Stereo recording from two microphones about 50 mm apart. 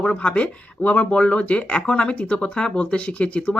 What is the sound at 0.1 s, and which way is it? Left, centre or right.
Speech, left.